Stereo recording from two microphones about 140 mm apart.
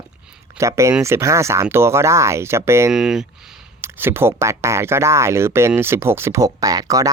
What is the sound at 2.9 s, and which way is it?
Speech, 5° right (ahead or behind).